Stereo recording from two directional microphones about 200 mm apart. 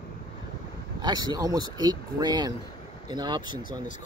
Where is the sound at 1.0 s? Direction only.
20° right (ahead or behind).